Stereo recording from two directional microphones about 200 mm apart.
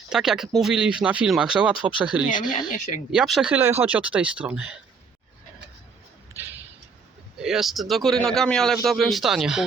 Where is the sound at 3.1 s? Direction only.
Centre (ahead or behind).